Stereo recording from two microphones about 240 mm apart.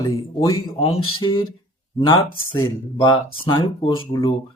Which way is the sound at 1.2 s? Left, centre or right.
Left.